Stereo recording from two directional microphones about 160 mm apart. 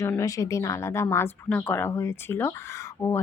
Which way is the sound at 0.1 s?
20° left (ahead or behind).